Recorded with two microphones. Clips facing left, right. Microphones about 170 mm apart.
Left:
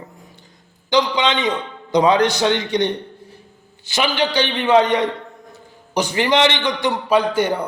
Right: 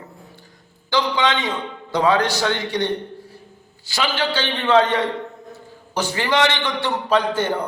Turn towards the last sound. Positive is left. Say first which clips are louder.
# left 2 dB
turn(degrees=10)  # may be behind; listen again after turning